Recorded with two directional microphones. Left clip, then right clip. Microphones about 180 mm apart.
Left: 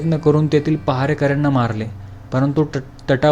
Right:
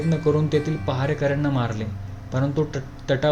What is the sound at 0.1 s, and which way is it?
Speech, 25° left (ahead or behind).